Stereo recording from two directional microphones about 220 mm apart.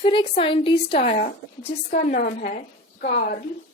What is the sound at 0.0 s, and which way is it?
A woman's voice, 25° left (ahead or behind).